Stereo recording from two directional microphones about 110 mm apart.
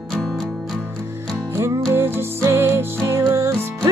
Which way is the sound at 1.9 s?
20° right (ahead or behind).